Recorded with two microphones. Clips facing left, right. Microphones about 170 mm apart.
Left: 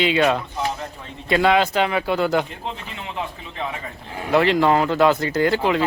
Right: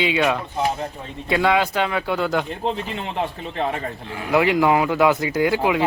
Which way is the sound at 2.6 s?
45° right (ahead or behind).